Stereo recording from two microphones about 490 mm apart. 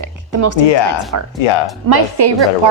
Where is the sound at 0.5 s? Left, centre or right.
Left.